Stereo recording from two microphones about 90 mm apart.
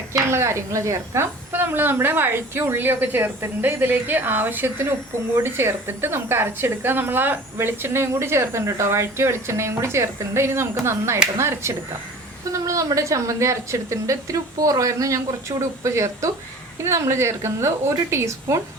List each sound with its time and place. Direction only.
0.3 s a woman's voice: 30° right (ahead or behind)